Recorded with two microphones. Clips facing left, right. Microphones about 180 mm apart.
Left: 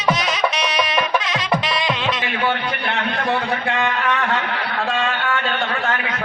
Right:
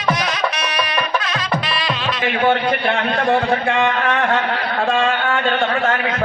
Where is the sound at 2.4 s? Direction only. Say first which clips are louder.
Right 7 dB; 45° right (ahead or behind).